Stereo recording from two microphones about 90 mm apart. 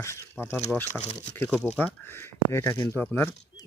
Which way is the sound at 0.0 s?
30° left (ahead or behind).